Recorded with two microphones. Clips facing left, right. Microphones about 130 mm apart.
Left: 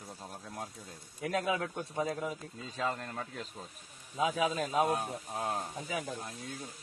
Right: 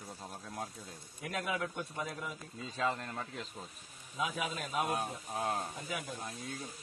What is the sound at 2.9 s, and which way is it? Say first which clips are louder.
Speech: left 1 dB; centre (ahead or behind).